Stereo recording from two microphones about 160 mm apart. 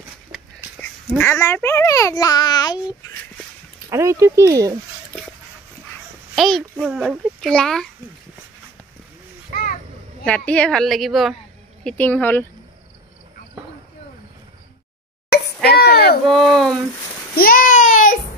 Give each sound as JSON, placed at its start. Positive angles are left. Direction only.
{"t": 1.1, "sound": "a child's voice", "side_deg": 15}
{"t": 3.9, "sound": "speech", "side_deg": -15}
{"t": 6.3, "sound": "a child's voice", "side_deg": 0}
{"t": 10.2, "sound": "a child's voice", "side_deg": 10}
{"t": 11.8, "sound": "speech", "side_deg": 10}
{"t": 15.2, "sound": "a sound", "side_deg": 85}
{"t": 16.3, "sound": "a child's voice", "side_deg": 0}
{"t": 17.4, "sound": "a sound", "side_deg": 60}